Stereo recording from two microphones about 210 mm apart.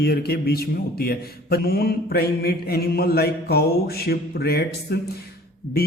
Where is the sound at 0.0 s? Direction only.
50° left (ahead or behind).